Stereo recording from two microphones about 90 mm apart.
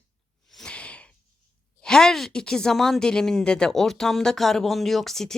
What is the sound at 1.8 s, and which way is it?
Speech, 5° left (ahead or behind).